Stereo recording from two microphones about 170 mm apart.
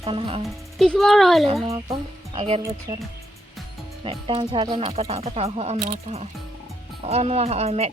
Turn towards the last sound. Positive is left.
turn(degrees=-35)  # may be behind; listen again after turning